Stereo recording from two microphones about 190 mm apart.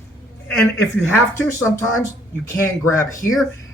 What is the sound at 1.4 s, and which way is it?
Speech, 15° left (ahead or behind).